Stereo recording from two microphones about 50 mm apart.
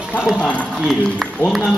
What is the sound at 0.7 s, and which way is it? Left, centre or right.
Speech, centre.